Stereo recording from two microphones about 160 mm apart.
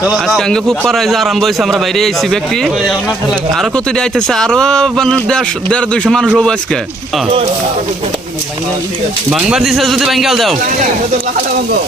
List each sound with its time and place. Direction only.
0.0 s a man's voice: centre (ahead or behind)
9.3 s a man's voice: centre (ahead or behind)